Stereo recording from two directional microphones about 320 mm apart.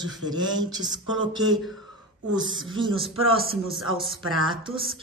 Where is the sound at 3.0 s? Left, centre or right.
Centre.